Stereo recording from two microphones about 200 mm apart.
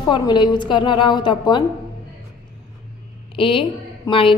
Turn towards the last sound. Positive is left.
turn(degrees=25)  # may be behind; listen again after turning